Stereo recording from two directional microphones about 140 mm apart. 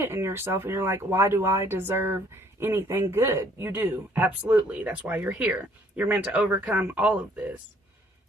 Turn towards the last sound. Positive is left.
turn(degrees=-10)  # may be behind; listen again after turning